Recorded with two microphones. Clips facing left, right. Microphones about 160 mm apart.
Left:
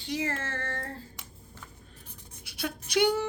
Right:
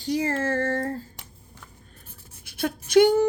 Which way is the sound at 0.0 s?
40° right (ahead or behind).